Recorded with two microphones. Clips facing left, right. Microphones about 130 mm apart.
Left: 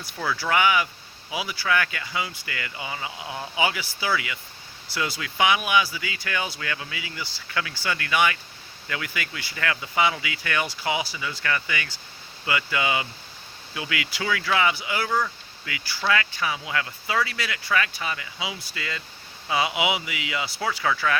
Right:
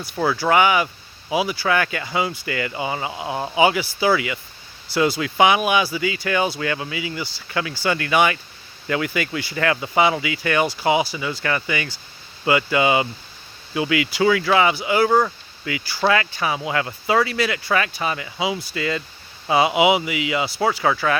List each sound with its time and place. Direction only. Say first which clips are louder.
0.2 s speech: right 6 dB; 35° right (ahead or behind)